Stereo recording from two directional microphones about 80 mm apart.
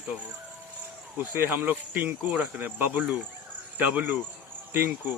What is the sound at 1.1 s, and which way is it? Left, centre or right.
Speech, right.